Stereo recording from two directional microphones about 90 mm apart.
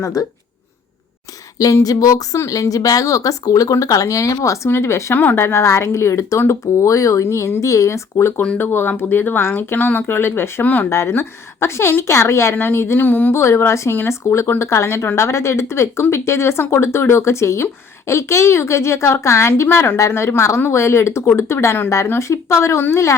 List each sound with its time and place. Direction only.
0.0 s speech: 40° left (ahead or behind)
1.5 s speech: 40° left (ahead or behind)